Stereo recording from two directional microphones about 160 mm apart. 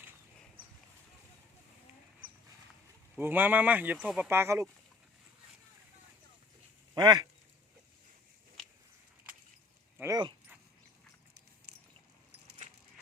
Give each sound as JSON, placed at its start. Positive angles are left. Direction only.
{"t": 3.2, "sound": "speech", "side_deg": -10}
{"t": 6.9, "sound": "speech", "side_deg": -25}
{"t": 10.0, "sound": "speech", "side_deg": -25}